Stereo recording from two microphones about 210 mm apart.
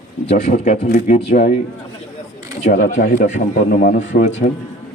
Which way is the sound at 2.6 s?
40° left (ahead or behind).